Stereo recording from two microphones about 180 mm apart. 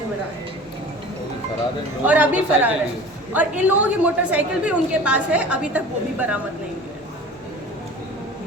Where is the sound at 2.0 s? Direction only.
10° right (ahead or behind).